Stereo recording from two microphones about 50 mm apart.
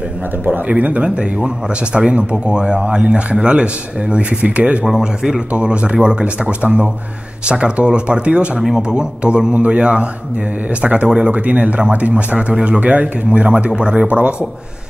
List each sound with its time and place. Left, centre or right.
0.5 s a man's voice: right
4.8 s speech: centre
5.5 s a man's voice: right
8.5 s a man's voice: centre; by 14.3 s right